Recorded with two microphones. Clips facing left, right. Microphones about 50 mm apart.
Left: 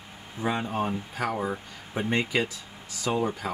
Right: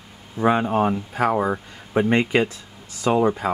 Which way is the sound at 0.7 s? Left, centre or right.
Right.